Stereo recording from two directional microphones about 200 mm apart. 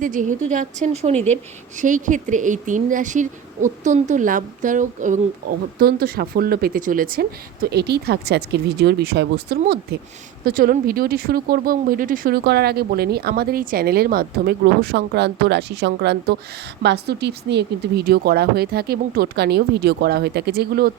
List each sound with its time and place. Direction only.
0.0 s a woman's voice: 40° right (ahead or behind)